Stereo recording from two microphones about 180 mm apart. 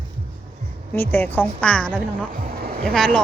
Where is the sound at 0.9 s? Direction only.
10° left (ahead or behind).